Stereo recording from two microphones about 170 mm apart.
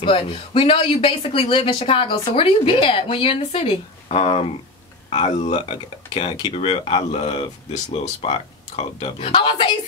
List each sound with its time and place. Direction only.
0.0 s speech: 30° left (ahead or behind)